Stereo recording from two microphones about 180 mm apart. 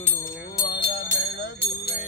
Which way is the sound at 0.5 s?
25° left (ahead or behind).